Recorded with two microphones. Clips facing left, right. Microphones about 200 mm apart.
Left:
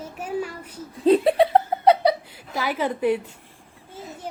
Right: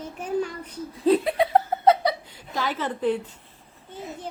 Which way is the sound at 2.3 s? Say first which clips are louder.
Left 1 dB; 10° left (ahead or behind).